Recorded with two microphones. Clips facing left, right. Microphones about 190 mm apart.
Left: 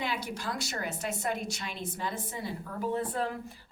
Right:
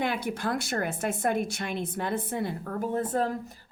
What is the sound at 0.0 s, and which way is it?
Speech, 55° right (ahead or behind).